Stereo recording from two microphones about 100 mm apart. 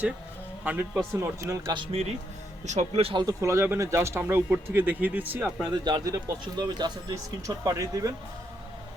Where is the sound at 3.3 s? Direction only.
30° right (ahead or behind).